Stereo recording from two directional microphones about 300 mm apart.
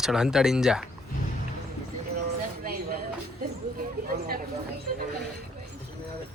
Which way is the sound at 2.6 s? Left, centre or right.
Right.